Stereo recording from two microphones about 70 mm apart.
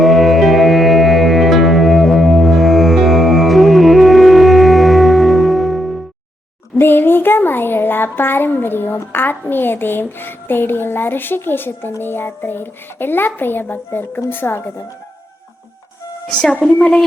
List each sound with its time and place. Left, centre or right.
0.0 s music: centre
6.7 s a sound: left
9.1 s a child's voice: left
16.4 s a woman's voice: centre